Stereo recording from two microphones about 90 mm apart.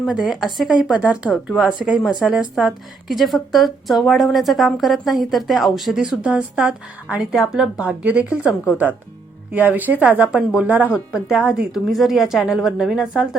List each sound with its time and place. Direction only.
0.0 s a woman's voice: 5° right (ahead or behind)
10.9 s a woman's voice: 5° right (ahead or behind)